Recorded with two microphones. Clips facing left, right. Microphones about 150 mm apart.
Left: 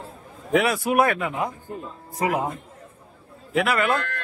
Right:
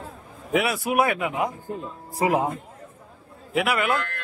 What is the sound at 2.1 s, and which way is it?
Speech, 25° right (ahead or behind).